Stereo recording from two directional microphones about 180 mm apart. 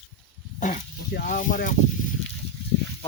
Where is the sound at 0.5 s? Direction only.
45° left (ahead or behind).